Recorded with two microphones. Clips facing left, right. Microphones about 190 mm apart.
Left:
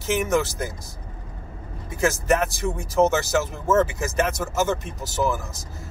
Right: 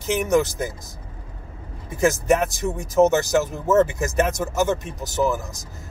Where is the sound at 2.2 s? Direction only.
20° right (ahead or behind).